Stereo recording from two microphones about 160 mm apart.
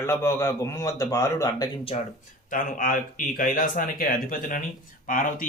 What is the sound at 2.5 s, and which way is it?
A man's voice, 60° left (ahead or behind).